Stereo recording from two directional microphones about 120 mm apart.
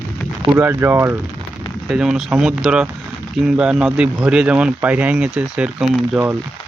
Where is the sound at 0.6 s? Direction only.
20° right (ahead or behind).